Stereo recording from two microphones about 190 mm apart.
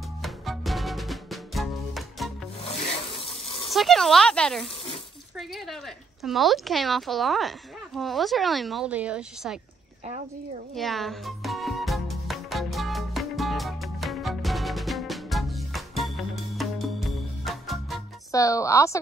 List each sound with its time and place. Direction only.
0.2 s music: centre (ahead or behind)
2.6 s rub: 30° left (ahead or behind)
3.7 s speech: centre (ahead or behind)
5.4 s a sound: centre (ahead or behind)
6.2 s speech: centre (ahead or behind)
10.7 s music: centre (ahead or behind)
18.3 s a woman's voice: 15° left (ahead or behind)